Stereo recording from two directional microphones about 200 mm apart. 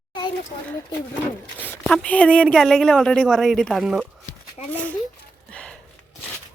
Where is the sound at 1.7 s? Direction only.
5° left (ahead or behind).